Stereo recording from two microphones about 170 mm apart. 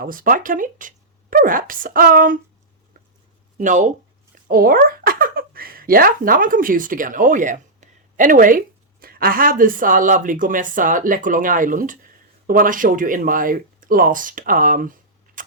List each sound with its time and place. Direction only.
0.0 s speech: 55° right (ahead or behind)
3.6 s speech: 45° right (ahead or behind)
15.4 s tick-tock: 50° right (ahead or behind)